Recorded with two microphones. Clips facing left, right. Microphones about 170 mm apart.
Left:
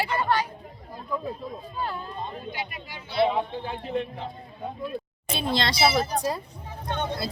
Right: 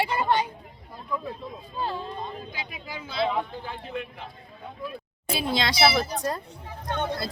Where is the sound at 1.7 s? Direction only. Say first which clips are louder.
Right 3 dB; 25° right (ahead or behind).